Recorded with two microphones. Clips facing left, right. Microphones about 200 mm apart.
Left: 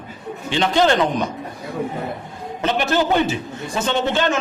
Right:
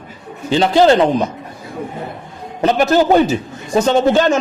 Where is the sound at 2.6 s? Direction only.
40° right (ahead or behind).